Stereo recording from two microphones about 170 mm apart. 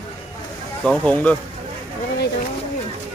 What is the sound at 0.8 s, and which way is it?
Speech, 5° left (ahead or behind).